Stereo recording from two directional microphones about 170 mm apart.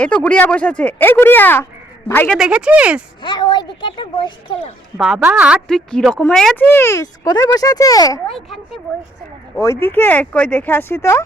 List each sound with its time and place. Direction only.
0.0 s speech: 5° left (ahead or behind)
2.4 s speech: 5° right (ahead or behind)
3.2 s speech: 25° left (ahead or behind)
4.9 s a woman's voice: centre (ahead or behind); by 8.2 s 20° left (ahead or behind)
8.3 s a woman's voice: centre (ahead or behind)
9.6 s speech: 15° left (ahead or behind)